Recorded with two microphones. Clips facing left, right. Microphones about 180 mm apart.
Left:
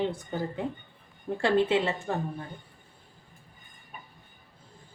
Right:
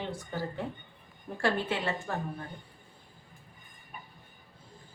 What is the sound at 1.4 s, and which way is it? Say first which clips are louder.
Speech: left 6 dB; 20° left (ahead or behind).